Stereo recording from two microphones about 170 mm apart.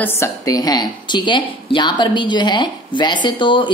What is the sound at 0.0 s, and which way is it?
A woman's voice, 20° left (ahead or behind).